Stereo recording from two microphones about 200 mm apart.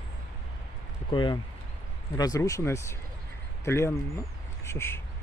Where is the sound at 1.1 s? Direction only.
25° left (ahead or behind).